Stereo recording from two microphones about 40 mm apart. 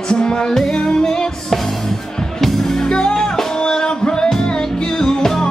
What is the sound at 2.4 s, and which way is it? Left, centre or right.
Music, centre.